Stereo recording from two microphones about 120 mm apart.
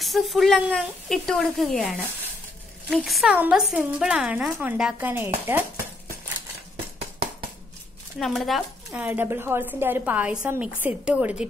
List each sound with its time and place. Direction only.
0.0 s a woman's voice: centre (ahead or behind); by 6.1 s 20° right (ahead or behind)
8.2 s a woman's voice: centre (ahead or behind)
8.9 s a woman's voice: 15° right (ahead or behind)